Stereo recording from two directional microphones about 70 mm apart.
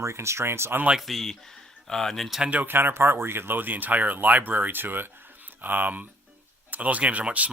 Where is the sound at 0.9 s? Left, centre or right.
Centre.